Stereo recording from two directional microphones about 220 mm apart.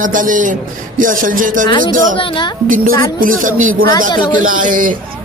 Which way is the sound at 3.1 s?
40° right (ahead or behind).